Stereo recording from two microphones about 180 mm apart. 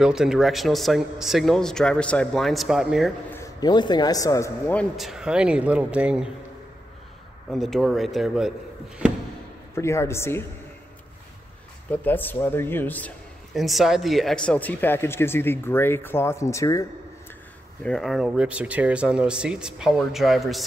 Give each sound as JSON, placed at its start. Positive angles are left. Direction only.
{"t": 0.0, "sound": "speech", "side_deg": -5}
{"t": 3.3, "sound": "a man's voice", "side_deg": 20}
{"t": 4.9, "sound": "speech", "side_deg": 0}
{"t": 7.5, "sound": "speech", "side_deg": 0}
{"t": 9.8, "sound": "a man's voice", "side_deg": 15}
{"t": 11.9, "sound": "a man's voice", "side_deg": 10}
{"t": 17.8, "sound": "speech", "side_deg": 0}